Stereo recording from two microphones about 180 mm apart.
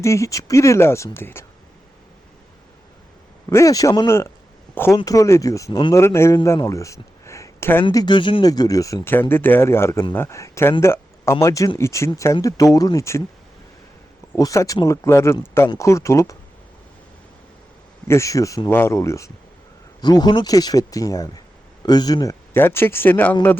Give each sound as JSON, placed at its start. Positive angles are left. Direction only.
{"t": 0.0, "sound": "speech", "side_deg": 15}
{"t": 3.5, "sound": "speech", "side_deg": 20}
{"t": 7.9, "sound": "speech", "side_deg": 25}
{"t": 14.3, "sound": "speech", "side_deg": 15}
{"t": 18.1, "sound": "speech", "side_deg": 15}